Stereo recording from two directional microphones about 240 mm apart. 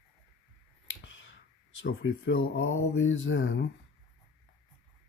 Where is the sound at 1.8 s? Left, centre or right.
Left.